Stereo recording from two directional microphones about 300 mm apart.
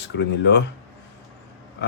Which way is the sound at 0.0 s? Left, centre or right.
Left.